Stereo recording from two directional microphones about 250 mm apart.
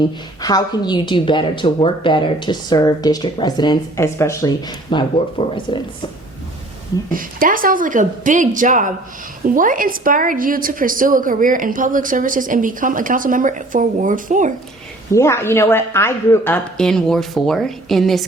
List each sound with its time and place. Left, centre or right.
0.4 s a woman's voice: centre
7.1 s a woman's voice: right
15.1 s a woman's voice: centre